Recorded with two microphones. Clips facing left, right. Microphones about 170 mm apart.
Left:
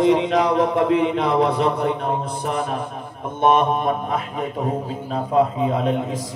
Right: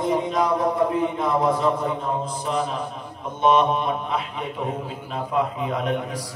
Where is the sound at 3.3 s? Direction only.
50° left (ahead or behind); by 6.2 s 25° left (ahead or behind).